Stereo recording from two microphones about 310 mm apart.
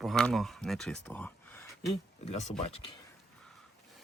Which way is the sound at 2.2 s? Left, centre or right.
Left.